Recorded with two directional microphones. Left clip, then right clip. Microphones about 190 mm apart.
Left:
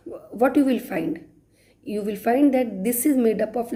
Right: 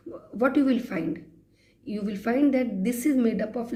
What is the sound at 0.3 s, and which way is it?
A woman's voice, 30° left (ahead or behind).